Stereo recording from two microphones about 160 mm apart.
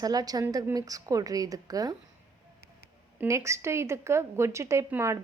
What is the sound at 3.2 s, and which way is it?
A woman's voice, 20° right (ahead or behind).